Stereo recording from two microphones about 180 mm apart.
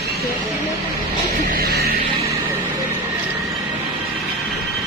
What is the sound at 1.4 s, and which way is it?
Music, 55° right (ahead or behind).